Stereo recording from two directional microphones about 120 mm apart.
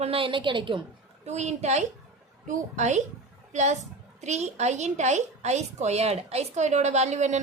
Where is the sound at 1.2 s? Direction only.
65° right (ahead or behind).